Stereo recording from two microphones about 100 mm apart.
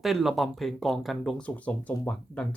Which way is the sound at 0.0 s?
Centre (ahead or behind).